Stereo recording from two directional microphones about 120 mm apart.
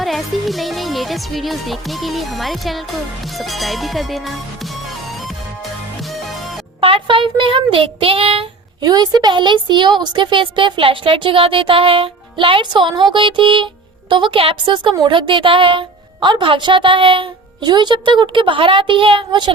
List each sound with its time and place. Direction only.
0.0 s speech: centre (ahead or behind)
6.7 s a woman's voice: 50° right (ahead or behind)
8.8 s a woman's voice: 35° right (ahead or behind)